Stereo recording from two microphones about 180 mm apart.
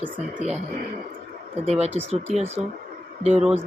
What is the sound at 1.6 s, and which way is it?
Speech, 35° right (ahead or behind).